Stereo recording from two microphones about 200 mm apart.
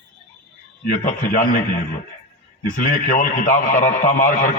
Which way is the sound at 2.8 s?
40° left (ahead or behind).